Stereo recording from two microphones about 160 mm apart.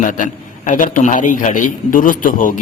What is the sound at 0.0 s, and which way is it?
A man's voice, 50° left (ahead or behind).